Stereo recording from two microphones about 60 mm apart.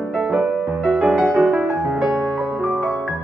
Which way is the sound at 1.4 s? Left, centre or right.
Right.